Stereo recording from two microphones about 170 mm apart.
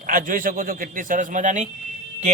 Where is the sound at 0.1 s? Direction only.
55° right (ahead or behind).